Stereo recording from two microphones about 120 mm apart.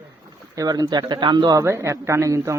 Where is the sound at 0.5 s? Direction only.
30° right (ahead or behind).